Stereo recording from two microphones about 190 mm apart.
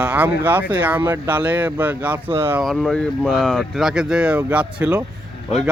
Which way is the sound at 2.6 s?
Centre (ahead or behind).